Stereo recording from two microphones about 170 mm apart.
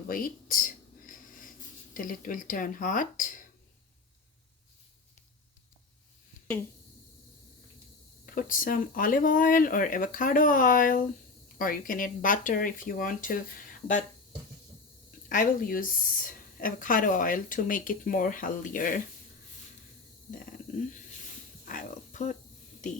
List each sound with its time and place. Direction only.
0.1 s a sound: 55° left (ahead or behind)
1.9 s a woman's voice: 50° left (ahead or behind)
8.4 s a woman's voice: 50° left (ahead or behind)
15.3 s a woman's voice: 55° left (ahead or behind)
21.6 s dog: 50° left (ahead or behind)